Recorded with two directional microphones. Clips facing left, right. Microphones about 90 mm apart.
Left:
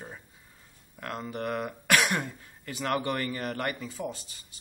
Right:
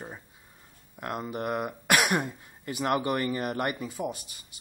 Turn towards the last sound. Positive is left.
turn(degrees=-15)  # may be behind; listen again after turning